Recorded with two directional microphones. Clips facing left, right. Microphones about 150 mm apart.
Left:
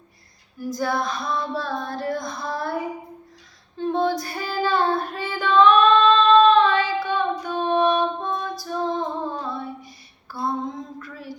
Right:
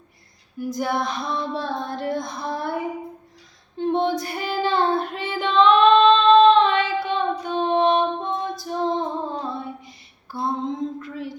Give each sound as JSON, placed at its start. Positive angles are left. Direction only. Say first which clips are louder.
{"t": 0.6, "sound": "female singing", "louder": "even", "side_deg": -20}
{"t": 3.8, "sound": "child singing", "louder": "right 1 dB", "side_deg": -20}
{"t": 10.3, "sound": "female singing", "louder": "right 1 dB", "side_deg": -20}